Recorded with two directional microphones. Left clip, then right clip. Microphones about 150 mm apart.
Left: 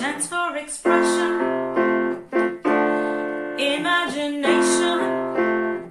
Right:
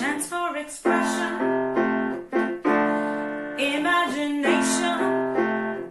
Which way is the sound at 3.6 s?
25° left (ahead or behind).